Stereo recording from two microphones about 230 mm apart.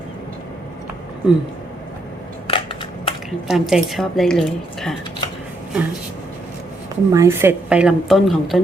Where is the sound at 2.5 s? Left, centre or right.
Left.